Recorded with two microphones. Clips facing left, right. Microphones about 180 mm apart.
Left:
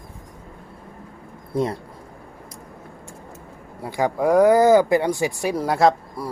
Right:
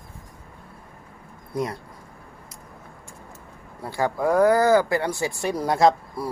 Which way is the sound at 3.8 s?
15° left (ahead or behind).